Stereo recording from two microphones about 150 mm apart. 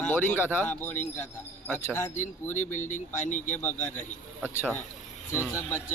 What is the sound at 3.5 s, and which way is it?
Speech, 15° left (ahead or behind).